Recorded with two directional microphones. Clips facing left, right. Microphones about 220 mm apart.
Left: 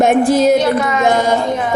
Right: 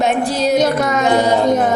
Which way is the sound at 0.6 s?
45° right (ahead or behind).